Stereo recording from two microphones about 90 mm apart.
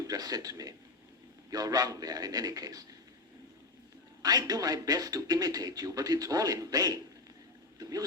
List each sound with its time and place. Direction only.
0.0 s a man's voice: 45° right (ahead or behind)
4.2 s a man's voice: 45° right (ahead or behind)